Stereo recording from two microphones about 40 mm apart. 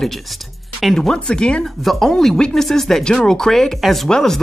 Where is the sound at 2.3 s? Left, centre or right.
Centre.